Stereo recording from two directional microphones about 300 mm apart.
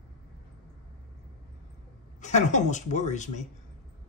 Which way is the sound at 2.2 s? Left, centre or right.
Left.